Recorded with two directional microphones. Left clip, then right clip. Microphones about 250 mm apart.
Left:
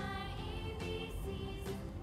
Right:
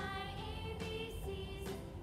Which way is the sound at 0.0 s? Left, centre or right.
Centre.